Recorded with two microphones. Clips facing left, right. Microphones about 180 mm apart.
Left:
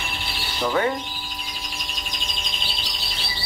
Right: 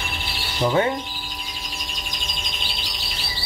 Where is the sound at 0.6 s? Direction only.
20° right (ahead or behind).